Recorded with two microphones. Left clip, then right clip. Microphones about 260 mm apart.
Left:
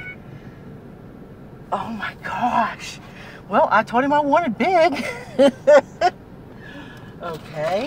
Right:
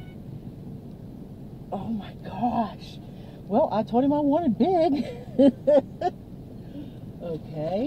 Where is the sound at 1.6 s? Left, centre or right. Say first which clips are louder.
Left 9 dB; left.